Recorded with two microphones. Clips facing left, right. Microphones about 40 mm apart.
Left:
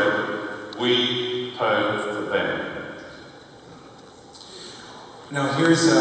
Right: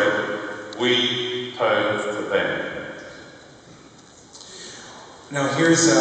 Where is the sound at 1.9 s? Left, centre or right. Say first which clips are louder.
Right 1 dB; centre.